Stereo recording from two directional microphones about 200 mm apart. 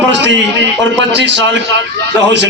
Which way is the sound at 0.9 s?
60° right (ahead or behind).